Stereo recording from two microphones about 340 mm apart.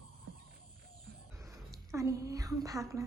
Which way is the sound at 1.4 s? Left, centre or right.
Centre.